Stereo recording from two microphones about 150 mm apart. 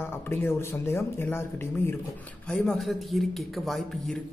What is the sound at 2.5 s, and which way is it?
A man's voice, 5° left (ahead or behind).